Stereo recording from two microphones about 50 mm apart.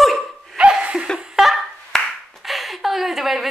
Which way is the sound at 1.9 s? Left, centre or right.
Centre.